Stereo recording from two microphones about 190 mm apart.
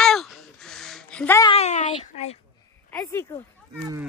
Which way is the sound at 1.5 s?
35° left (ahead or behind).